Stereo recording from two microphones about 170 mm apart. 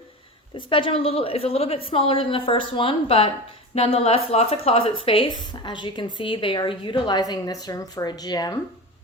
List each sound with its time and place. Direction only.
0.5 s a woman's voice: 30° left (ahead or behind)